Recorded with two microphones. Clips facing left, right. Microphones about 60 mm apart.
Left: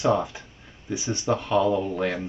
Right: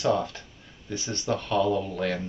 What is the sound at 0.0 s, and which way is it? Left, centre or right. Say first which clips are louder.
Speech: left 2 dB; centre.